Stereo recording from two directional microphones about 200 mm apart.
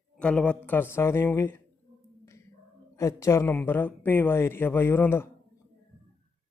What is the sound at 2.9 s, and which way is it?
Speech, 15° left (ahead or behind).